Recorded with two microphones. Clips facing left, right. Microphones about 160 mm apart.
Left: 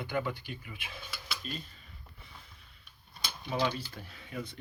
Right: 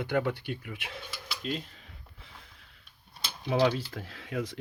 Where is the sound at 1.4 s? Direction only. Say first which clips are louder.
Right 9 dB; 90° right.